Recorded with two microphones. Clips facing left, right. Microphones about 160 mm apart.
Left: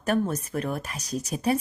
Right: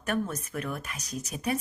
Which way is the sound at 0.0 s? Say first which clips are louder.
Left 5 dB; 35° left (ahead or behind).